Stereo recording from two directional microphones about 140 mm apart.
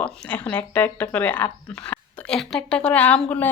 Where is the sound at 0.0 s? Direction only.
10° left (ahead or behind).